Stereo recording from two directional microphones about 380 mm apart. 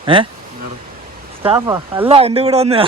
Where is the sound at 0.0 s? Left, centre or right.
Centre.